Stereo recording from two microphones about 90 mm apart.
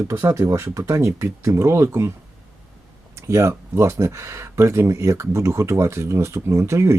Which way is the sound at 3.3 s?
35° right (ahead or behind).